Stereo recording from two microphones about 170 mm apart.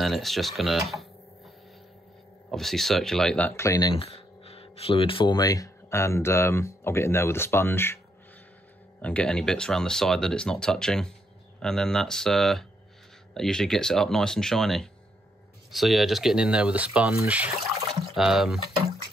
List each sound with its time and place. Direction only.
0.0 s speech: centre (ahead or behind)
2.5 s speech: centre (ahead or behind); by 3.9 s 20° left (ahead or behind)
3.9 s speech: 35° left (ahead or behind); by 8.0 s 15° left (ahead or behind)
9.0 s speech: 5° left (ahead or behind)